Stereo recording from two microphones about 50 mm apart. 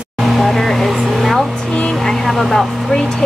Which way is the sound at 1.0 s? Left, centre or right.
Centre.